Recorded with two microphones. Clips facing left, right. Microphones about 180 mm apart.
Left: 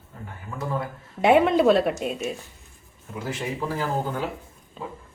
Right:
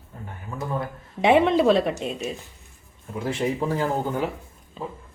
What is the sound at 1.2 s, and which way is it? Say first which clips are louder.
A woman's voice: even; centre (ahead or behind).